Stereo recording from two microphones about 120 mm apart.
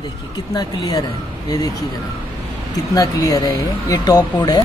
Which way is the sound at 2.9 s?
30° left (ahead or behind).